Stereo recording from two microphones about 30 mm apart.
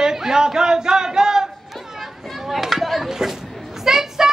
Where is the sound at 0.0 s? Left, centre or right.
Centre.